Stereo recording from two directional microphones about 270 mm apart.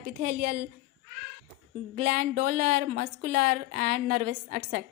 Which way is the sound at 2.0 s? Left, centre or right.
Right.